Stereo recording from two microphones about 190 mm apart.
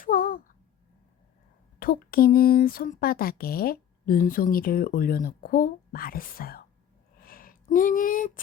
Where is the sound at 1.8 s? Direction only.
50° left (ahead or behind).